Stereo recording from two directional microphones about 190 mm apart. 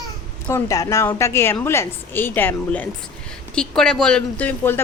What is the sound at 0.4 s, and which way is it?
A woman's voice, 15° left (ahead or behind).